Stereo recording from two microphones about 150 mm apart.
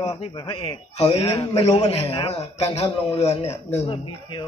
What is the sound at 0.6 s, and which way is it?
A man's voice, 40° left (ahead or behind).